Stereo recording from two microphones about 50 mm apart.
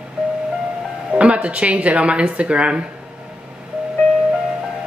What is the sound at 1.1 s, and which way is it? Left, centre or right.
Speech, right.